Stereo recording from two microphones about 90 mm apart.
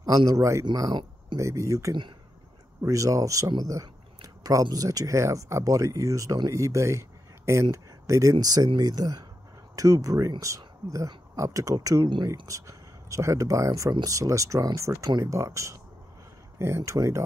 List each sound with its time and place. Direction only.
0.4 s speech: 35° right (ahead or behind)
0.7 s speech: 50° right (ahead or behind)
1.4 s speech: 35° right (ahead or behind)